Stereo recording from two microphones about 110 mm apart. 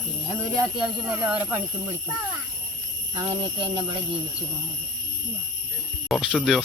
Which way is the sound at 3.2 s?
50° right (ahead or behind).